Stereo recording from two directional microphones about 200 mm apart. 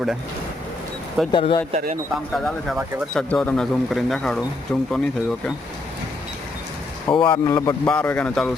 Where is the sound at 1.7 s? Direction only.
35° right (ahead or behind).